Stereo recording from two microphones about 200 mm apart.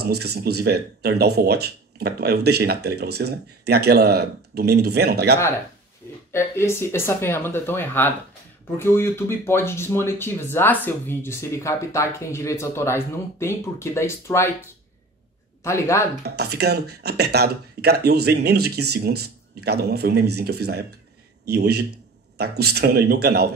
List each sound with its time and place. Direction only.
0.0 s speech: 55° right (ahead or behind)
6.3 s speech: 15° left (ahead or behind)
16.3 s speech: 55° right (ahead or behind)